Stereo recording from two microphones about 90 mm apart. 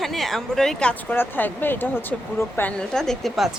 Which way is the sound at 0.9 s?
20° left (ahead or behind).